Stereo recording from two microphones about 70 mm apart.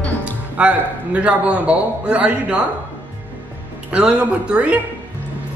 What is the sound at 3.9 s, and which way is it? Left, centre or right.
Speech, centre.